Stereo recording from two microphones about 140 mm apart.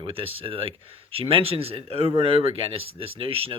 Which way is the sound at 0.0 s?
40° right (ahead or behind).